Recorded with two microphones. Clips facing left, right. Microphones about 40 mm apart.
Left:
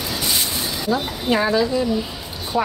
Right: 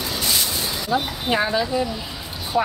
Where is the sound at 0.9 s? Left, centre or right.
Centre.